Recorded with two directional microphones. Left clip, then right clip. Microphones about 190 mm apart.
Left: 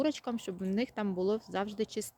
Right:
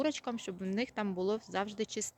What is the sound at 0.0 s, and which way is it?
Speech, 15° left (ahead or behind).